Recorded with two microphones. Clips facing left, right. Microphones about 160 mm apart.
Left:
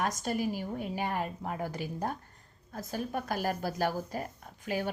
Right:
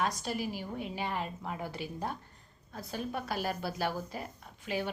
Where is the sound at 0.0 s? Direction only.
45° left (ahead or behind).